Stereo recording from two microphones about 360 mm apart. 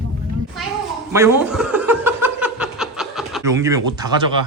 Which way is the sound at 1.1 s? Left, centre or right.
Centre.